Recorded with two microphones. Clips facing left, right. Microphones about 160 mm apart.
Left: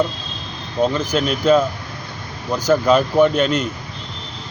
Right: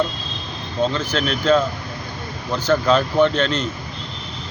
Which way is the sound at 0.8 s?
10° left (ahead or behind).